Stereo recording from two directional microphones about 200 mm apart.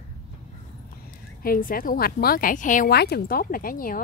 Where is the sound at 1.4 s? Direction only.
45° left (ahead or behind).